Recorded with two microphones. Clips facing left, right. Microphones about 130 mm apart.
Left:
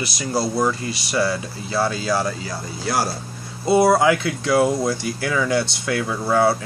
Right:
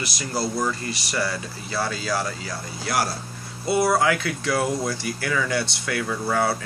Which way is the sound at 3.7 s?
25° left (ahead or behind).